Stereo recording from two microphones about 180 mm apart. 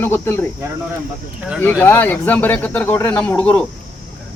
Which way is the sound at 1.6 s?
10° left (ahead or behind).